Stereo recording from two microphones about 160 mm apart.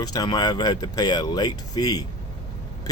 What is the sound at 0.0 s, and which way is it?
Speech, 25° left (ahead or behind).